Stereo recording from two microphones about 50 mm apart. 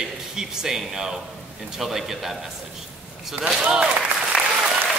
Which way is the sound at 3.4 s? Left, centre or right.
Right.